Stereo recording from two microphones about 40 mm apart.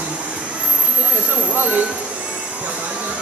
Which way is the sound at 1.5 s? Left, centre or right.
Right.